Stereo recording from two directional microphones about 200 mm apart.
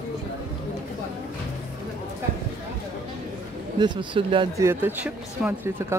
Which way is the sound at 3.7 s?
25° right (ahead or behind).